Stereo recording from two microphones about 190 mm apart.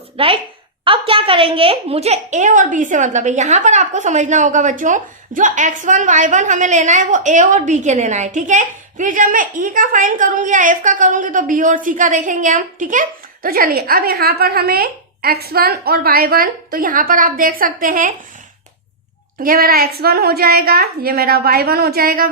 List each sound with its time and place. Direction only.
0.2 s a woman's voice: 30° right (ahead or behind); by 18.1 s 45° right (ahead or behind)
19.4 s a woman's voice: 50° right (ahead or behind)